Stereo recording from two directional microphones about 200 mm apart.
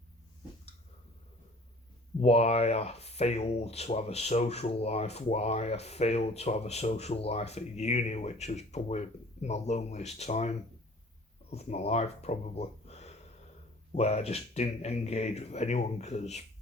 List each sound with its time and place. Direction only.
2.2 s speech: 30° left (ahead or behind)
11.5 s speech: 30° left (ahead or behind)